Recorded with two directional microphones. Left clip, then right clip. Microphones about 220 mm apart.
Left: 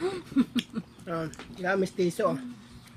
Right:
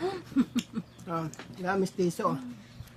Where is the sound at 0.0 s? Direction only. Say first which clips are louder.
Left 2 dB; 10° right (ahead or behind).